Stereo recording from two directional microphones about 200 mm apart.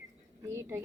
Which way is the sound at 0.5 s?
15° right (ahead or behind).